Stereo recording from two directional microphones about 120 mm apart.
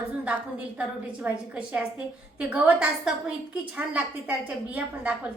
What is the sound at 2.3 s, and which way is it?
A woman's voice, 10° right (ahead or behind).